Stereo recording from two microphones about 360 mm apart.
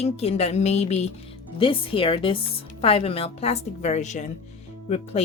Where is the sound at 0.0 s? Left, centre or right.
Centre.